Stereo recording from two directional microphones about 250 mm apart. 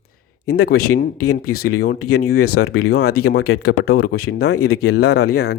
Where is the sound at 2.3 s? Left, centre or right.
Left.